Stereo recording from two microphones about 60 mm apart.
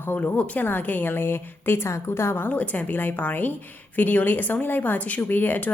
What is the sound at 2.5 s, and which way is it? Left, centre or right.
A woman's voice, left.